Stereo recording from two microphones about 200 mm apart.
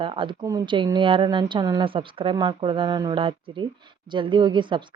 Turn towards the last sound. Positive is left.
turn(degrees=-25)  # may be behind; listen again after turning